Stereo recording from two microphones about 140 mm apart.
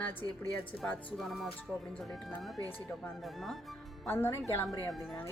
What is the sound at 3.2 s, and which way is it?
Speech, centre (ahead or behind).